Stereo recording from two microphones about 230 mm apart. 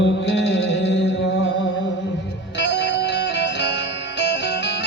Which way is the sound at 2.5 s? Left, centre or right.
Left.